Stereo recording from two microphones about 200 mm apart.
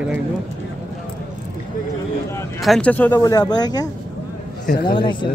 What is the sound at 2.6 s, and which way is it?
Speech, 5° left (ahead or behind).